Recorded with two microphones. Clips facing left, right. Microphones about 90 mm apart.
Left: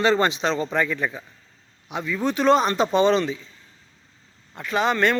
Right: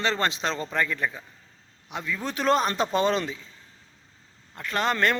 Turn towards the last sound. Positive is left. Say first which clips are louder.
# left 4 dB
turn(degrees=0)  # may be behind; listen again after turning